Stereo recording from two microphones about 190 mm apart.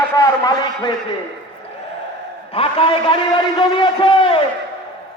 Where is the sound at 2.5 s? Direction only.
30° left (ahead or behind).